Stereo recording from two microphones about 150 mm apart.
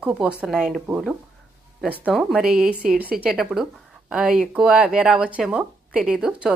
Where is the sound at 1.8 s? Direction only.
Centre (ahead or behind).